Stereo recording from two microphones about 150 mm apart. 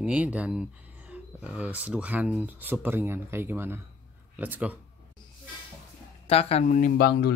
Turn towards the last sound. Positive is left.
turn(degrees=90)